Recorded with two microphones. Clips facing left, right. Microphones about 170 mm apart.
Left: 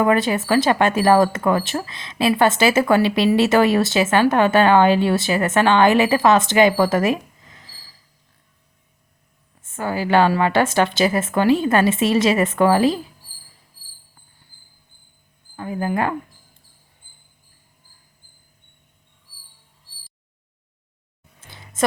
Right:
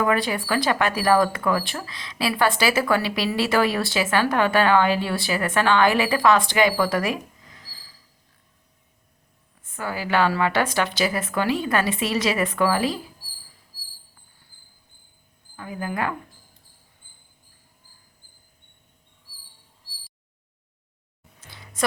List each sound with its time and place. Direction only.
0.0 s speech: 25° left (ahead or behind)
9.6 s speech: 25° left (ahead or behind)
15.5 s speech: 35° left (ahead or behind)
21.8 s a sound: 25° left (ahead or behind)